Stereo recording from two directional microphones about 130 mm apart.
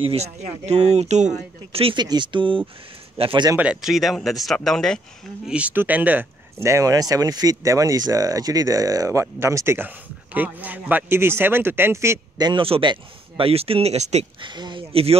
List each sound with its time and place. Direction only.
0.0 s speech: 55° right (ahead or behind)
1.7 s speech: 45° right (ahead or behind)
2.0 s speech: 35° right (ahead or behind)
3.5 s speech: 5° right (ahead or behind)
5.5 s speech: 10° right (ahead or behind)
12.4 s speech: 35° right (ahead or behind); by 14.2 s 55° right (ahead or behind)
14.4 s speech: 35° right (ahead or behind)